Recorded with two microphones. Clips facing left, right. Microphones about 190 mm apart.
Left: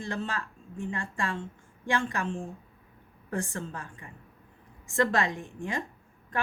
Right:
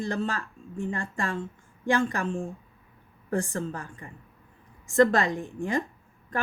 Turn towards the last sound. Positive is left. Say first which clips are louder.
# right 4 dB
turn(degrees=-40)  # may be behind; listen again after turning